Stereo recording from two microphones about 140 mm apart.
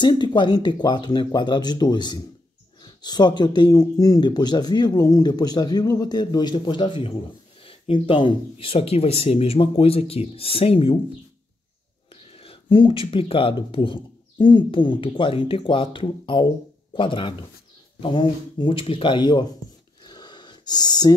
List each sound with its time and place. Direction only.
0.0 s speech: 30° left (ahead or behind)
12.4 s speech: 35° left (ahead or behind)
20.1 s a sound: 30° left (ahead or behind)